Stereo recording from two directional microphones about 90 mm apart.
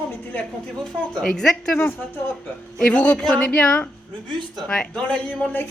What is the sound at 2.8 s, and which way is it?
Speech, 15° left (ahead or behind).